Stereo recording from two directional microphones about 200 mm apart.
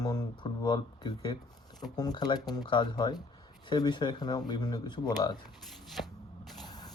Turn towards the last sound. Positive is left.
turn(degrees=20)  # may be behind; listen again after turning